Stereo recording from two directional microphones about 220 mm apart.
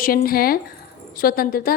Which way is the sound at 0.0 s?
40° left (ahead or behind).